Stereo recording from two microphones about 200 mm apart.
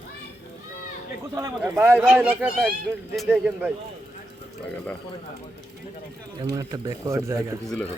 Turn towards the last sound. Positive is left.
turn(degrees=-15)  # may be behind; listen again after turning